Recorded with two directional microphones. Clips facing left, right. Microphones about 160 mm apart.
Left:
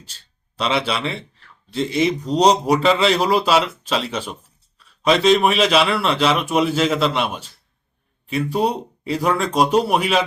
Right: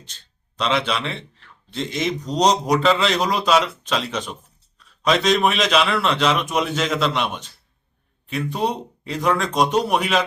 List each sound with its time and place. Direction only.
0.5 s a man's voice: 5° left (ahead or behind)